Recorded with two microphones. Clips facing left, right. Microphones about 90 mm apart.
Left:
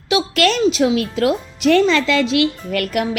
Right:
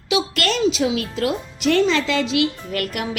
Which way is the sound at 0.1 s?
55° left (ahead or behind).